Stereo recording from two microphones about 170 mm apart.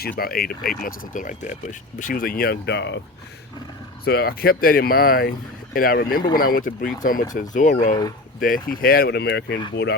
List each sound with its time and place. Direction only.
0.2 s speech: 60° left (ahead or behind); by 3.0 s 85° left
4.0 s speech: 65° left (ahead or behind); by 7.9 s 45° left (ahead or behind)
8.4 s speech: 55° left (ahead or behind); by 9.6 s 90° left